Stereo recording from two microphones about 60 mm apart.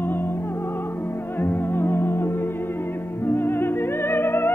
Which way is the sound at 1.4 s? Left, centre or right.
Left.